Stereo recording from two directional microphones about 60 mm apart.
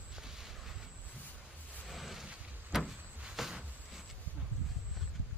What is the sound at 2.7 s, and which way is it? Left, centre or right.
Vehicle, centre.